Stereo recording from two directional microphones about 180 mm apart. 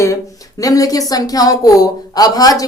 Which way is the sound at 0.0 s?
15° left (ahead or behind).